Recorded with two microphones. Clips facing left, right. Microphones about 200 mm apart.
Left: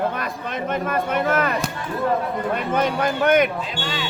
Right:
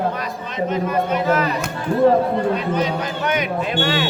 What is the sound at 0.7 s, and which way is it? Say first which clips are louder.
Speech: right 3 dB; 55° left (ahead or behind).